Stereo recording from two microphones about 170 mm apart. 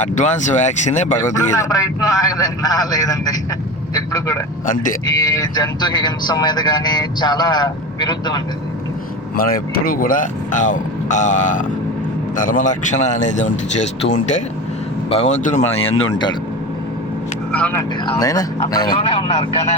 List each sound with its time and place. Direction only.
0.0 s speech: 45° left (ahead or behind)
1.5 s speech: 20° left (ahead or behind)
4.6 s speech: 50° left (ahead or behind)
5.2 s speech: 20° left (ahead or behind)
9.3 s speech: 60° left (ahead or behind)
15.8 s speech: 35° left (ahead or behind)
17.5 s speech: 10° left (ahead or behind)
18.2 s speech: 20° left (ahead or behind); by 19.7 s 40° left (ahead or behind)